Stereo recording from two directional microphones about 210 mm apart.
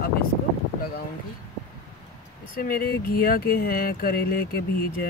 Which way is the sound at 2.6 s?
45° left (ahead or behind).